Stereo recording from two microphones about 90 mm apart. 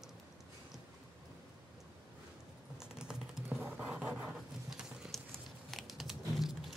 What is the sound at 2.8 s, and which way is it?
Typing, 10° right (ahead or behind).